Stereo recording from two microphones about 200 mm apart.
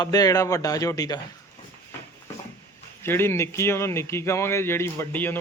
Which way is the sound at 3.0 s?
10° left (ahead or behind).